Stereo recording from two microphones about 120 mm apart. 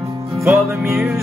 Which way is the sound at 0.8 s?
5° right (ahead or behind).